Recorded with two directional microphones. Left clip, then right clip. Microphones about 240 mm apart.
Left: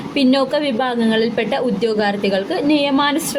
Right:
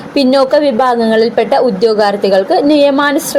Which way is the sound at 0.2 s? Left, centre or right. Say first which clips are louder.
Right 7 dB; centre.